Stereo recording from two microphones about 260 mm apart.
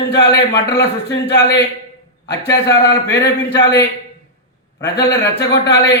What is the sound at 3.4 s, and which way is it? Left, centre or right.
Speech, centre.